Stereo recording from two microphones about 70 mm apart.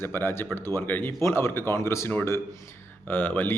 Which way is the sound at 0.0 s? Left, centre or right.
Left.